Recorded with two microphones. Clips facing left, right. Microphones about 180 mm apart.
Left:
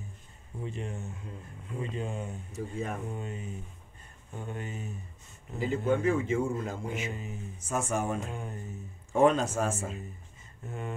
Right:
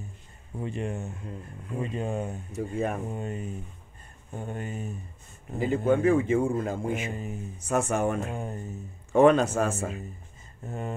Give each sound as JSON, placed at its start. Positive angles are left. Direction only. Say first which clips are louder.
{"t": 0.6, "sound": "a man's voice", "louder": "right 5 dB", "side_deg": -60}
{"t": 10.7, "sound": "mantra", "louder": "right 4 dB", "side_deg": -40}